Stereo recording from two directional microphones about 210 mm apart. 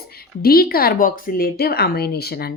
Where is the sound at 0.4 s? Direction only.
45° left (ahead or behind).